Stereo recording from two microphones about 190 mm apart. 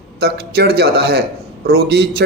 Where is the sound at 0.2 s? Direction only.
55° right (ahead or behind).